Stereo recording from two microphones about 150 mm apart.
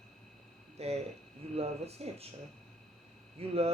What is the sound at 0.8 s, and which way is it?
Speech, 45° right (ahead or behind).